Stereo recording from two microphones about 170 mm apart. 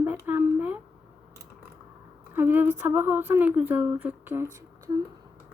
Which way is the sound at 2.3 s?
10° right (ahead or behind).